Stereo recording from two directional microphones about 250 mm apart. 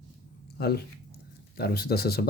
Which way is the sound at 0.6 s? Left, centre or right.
Left.